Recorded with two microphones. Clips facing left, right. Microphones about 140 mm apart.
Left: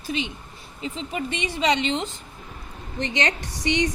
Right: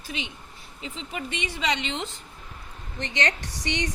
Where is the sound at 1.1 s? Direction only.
25° left (ahead or behind).